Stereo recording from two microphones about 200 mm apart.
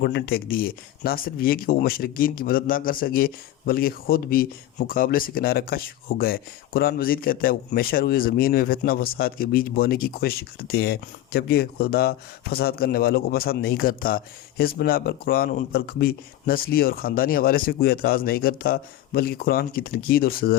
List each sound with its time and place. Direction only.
0.0 s speech: 55° left (ahead or behind)